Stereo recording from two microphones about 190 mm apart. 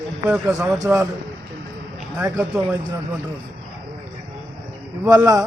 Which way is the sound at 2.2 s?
10° right (ahead or behind).